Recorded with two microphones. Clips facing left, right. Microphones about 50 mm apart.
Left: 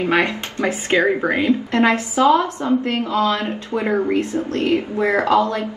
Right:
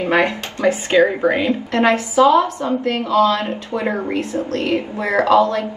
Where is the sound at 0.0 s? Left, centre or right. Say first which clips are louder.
Right 1 dB; right.